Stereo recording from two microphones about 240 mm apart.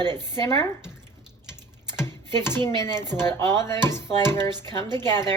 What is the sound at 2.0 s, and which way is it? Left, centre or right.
Chopping, centre.